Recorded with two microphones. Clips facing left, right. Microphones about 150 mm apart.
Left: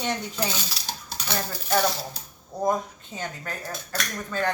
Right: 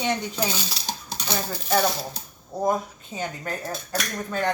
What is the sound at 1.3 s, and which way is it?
Speech, 10° right (ahead or behind).